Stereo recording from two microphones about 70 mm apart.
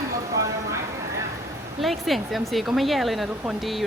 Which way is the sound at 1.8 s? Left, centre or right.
Centre.